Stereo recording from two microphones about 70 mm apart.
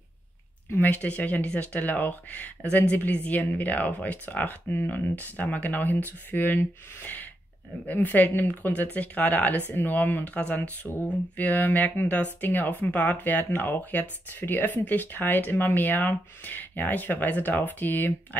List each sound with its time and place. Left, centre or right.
0.7 s speech: left